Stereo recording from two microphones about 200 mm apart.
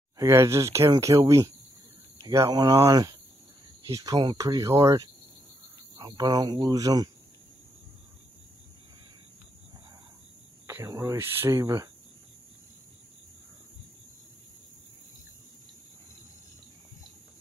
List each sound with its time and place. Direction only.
0.2 s speech: 15° right (ahead or behind)
10.7 s speech: 15° right (ahead or behind)